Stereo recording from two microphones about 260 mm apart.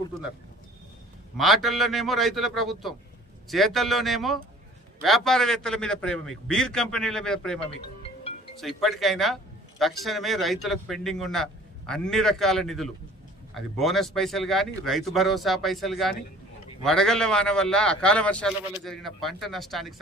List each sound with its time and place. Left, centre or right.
1.4 s a man's voice: centre
7.6 s music: left
8.6 s a man's voice: centre